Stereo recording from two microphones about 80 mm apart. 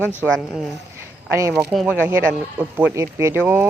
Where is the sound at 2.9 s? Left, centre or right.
Right.